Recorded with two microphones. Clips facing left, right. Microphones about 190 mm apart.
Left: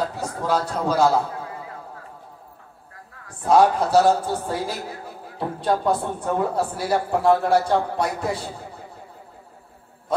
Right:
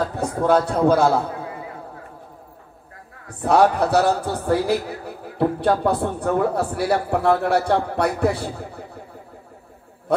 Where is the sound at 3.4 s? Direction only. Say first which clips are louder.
Even; 65° right (ahead or behind).